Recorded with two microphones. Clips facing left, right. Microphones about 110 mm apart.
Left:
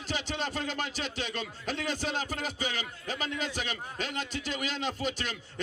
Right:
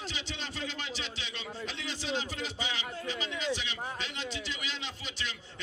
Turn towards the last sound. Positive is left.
turn(degrees=50)  # may be behind; listen again after turning